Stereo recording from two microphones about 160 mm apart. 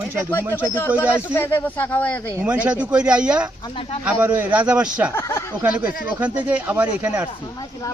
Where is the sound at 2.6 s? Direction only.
10° right (ahead or behind).